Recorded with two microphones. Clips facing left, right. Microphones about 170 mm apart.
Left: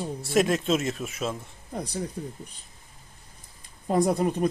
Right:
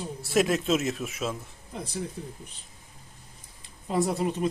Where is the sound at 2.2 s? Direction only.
45° left (ahead or behind).